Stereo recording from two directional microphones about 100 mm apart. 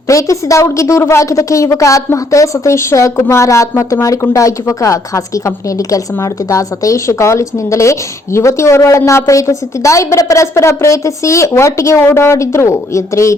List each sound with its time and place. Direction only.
0.1 s a woman's voice: 35° left (ahead or behind)